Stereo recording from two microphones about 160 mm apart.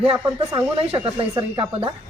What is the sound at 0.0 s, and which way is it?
A woman's voice, 35° right (ahead or behind).